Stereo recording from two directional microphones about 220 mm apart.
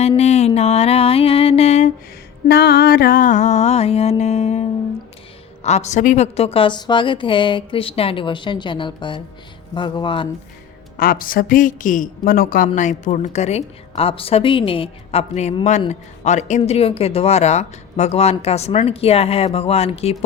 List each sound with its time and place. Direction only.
0.2 s a sound: 30° left (ahead or behind)
2.5 s music: 45° left (ahead or behind); by 4.6 s 30° left (ahead or behind)
5.6 s a woman's voice: 30° left (ahead or behind)
10.9 s a woman's voice: 40° left (ahead or behind)